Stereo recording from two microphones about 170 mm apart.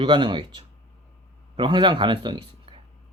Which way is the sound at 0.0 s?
30° right (ahead or behind).